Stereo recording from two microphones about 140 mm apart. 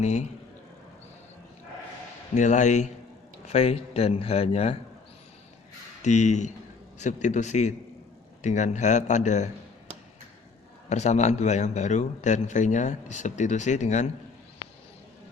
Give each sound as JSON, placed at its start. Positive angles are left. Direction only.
{"t": 0.0, "sound": "speech", "side_deg": 55}
{"t": 2.3, "sound": "a man's voice", "side_deg": 60}
{"t": 6.0, "sound": "a man's voice", "side_deg": 55}
{"t": 10.8, "sound": "a man's voice", "side_deg": 55}